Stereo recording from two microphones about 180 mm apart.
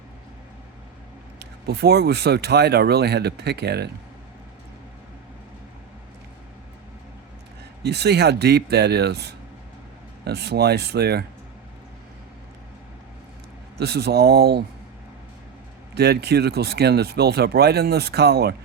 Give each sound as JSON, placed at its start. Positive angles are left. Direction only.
{"t": 1.4, "sound": "speech", "side_deg": -65}
{"t": 7.9, "sound": "speech", "side_deg": -65}
{"t": 13.7, "sound": "speech", "side_deg": -65}
{"t": 16.0, "sound": "speech", "side_deg": -65}